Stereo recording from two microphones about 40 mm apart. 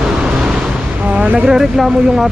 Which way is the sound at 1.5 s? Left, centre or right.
Centre.